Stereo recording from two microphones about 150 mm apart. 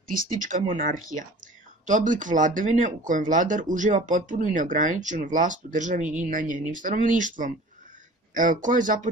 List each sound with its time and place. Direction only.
0.1 s speech: 65° right (ahead or behind)